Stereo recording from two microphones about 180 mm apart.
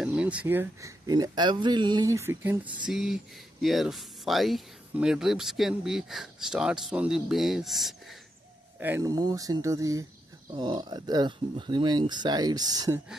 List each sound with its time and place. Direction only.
0.0 s speech: 5° right (ahead or behind)
8.7 s speech: 10° right (ahead or behind)